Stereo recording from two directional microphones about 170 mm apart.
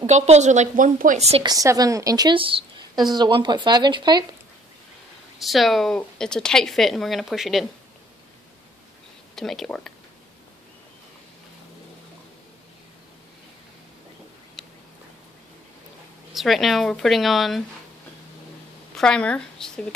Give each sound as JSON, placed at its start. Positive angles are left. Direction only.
{"t": 0.0, "sound": "a woman's voice", "side_deg": -40}
{"t": 1.4, "sound": "a woman's voice", "side_deg": -20}
{"t": 5.4, "sound": "speech", "side_deg": 0}
{"t": 9.3, "sound": "speech", "side_deg": 0}
{"t": 16.3, "sound": "speech", "side_deg": 0}
{"t": 18.9, "sound": "speech", "side_deg": 5}